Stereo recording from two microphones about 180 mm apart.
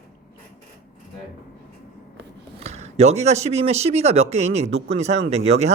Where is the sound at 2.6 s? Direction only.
35° right (ahead or behind).